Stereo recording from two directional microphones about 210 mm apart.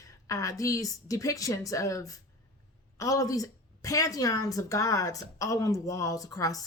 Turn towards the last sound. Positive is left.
turn(degrees=15)  # may be behind; listen again after turning